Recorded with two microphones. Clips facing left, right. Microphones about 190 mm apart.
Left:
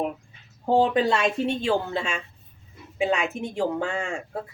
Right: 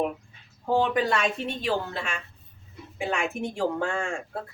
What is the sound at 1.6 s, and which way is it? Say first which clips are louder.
Speech: left 4 dB; 25° left (ahead or behind).